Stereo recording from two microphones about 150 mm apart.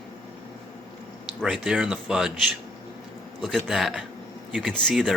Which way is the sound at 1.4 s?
5° right (ahead or behind).